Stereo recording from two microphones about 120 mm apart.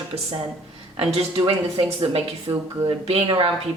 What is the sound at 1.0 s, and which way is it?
Speech, 50° right (ahead or behind).